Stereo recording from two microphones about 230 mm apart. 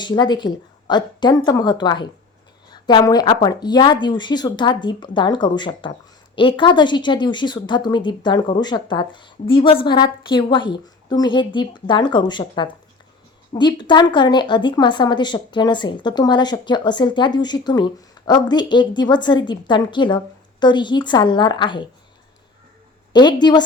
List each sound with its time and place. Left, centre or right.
0.0 s speech: centre
23.1 s speech: centre